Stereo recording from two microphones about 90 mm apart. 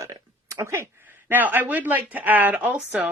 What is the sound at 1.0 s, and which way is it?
Speech, 20° right (ahead or behind).